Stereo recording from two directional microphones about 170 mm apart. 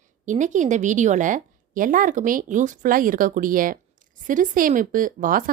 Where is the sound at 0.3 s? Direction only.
45° right (ahead or behind).